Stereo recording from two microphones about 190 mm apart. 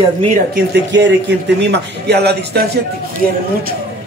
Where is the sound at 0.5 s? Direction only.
65° right (ahead or behind).